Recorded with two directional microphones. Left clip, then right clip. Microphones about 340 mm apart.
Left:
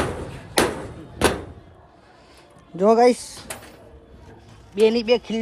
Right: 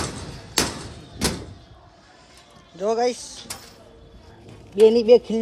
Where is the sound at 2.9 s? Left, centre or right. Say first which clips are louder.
Left 7 dB; centre.